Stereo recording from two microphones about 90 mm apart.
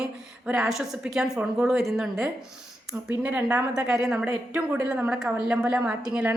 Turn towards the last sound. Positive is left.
turn(degrees=-10)  # may be behind; listen again after turning